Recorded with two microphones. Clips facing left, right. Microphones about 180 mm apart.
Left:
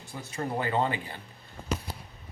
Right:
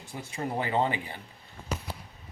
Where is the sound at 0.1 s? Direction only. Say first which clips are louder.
Even; 10° right (ahead or behind).